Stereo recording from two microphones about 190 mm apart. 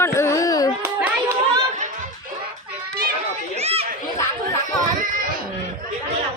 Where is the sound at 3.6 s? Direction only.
30° right (ahead or behind).